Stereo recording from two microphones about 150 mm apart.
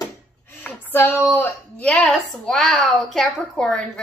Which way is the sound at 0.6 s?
10° left (ahead or behind).